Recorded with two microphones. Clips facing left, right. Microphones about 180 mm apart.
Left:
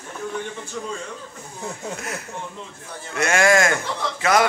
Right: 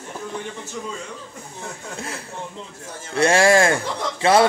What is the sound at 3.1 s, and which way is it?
Speech, 30° right (ahead or behind).